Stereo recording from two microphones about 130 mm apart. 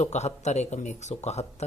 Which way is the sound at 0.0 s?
60° left (ahead or behind).